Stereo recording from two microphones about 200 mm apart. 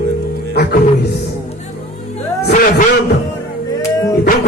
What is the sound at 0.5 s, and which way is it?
Music, 55° left (ahead or behind).